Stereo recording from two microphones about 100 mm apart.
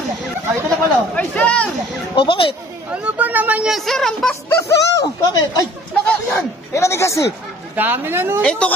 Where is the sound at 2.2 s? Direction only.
60° left (ahead or behind).